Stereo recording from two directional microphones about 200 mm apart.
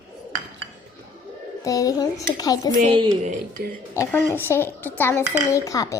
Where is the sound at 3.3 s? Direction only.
40° right (ahead or behind).